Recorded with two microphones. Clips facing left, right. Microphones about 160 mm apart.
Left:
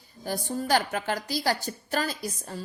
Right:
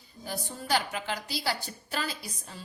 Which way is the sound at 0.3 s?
45° left (ahead or behind).